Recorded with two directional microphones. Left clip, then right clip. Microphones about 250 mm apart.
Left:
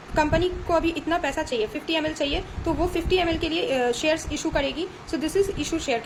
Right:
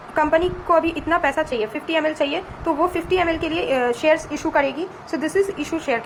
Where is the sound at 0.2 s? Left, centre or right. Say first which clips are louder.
Right 4 dB; centre.